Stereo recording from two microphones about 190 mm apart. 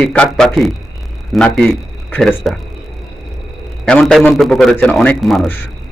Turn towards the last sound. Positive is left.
turn(degrees=0)  # may be behind; listen again after turning